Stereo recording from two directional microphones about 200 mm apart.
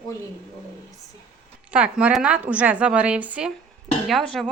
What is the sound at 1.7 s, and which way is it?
A woman's voice, 5° right (ahead or behind).